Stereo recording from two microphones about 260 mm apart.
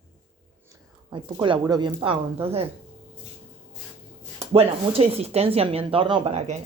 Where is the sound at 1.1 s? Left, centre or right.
Centre.